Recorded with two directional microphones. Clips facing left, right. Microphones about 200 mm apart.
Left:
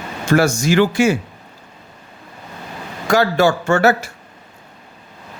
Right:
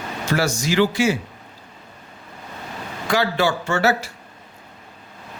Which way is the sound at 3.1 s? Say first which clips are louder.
Left 5 dB; 45° left (ahead or behind).